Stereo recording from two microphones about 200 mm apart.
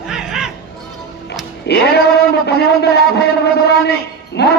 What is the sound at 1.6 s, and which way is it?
A man's voice, 55° left (ahead or behind).